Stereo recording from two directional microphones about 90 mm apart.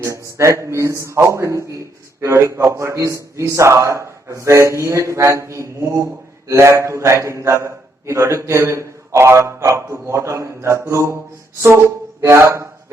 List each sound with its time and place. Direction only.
0.3 s a man's voice: 35° right (ahead or behind)
12.2 s speech: 30° right (ahead or behind)